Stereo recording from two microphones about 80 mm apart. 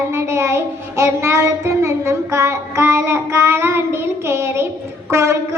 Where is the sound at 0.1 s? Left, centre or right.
Right.